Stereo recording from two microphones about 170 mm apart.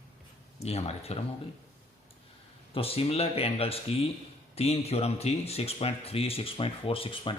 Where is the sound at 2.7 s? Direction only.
35° left (ahead or behind).